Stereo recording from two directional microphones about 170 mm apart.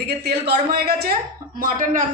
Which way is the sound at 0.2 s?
75° right (ahead or behind).